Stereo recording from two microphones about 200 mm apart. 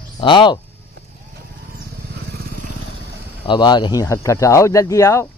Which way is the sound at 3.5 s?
20° left (ahead or behind).